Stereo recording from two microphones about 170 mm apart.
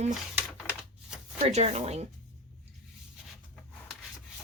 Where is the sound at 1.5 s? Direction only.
40° right (ahead or behind).